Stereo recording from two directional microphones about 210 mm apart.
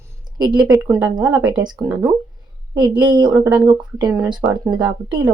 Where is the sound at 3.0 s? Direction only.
20° right (ahead or behind).